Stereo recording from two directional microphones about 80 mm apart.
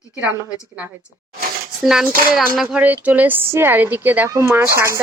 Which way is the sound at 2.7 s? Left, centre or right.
Centre.